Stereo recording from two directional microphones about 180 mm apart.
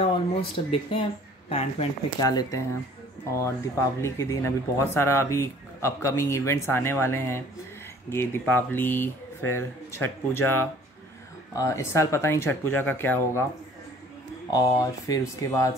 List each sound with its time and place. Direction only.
0.0 s speech: 30° left (ahead or behind)
2.1 s speech: 20° left (ahead or behind)
4.0 s speech: 15° left (ahead or behind)
14.5 s speech: 20° left (ahead or behind)